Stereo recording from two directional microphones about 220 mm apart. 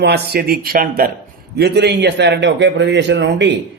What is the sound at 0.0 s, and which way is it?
A man's voice, 45° right (ahead or behind).